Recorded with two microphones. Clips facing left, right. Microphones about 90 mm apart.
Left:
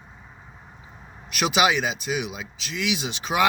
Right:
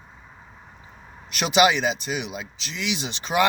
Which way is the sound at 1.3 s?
5° left (ahead or behind).